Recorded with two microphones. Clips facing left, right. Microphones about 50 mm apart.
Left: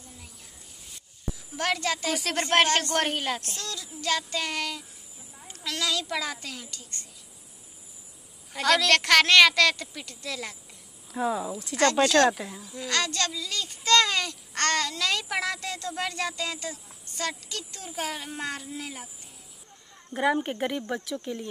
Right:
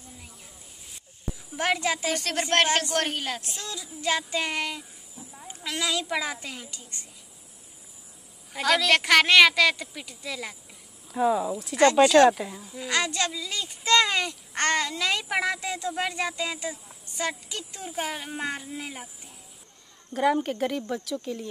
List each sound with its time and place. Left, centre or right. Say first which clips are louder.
1.6 s speech: right 2 dB; centre
2.1 s speech: even; centre
2.5 s speech: left 1 dB; centre
3.0 s speech: left 1 dB; centre
3.3 s a child's voice: even; centre
8.5 s speech: even; centre
11.8 s speech: right 4 dB; centre
12.7 s speech: right 1 dB; centre
20.1 s speech: right 2 dB; centre